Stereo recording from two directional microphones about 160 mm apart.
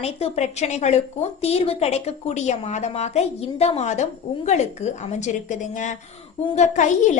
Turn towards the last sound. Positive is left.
turn(degrees=50)  # may be behind; listen again after turning